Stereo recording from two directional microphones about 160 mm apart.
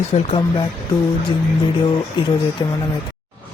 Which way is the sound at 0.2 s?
35° left (ahead or behind).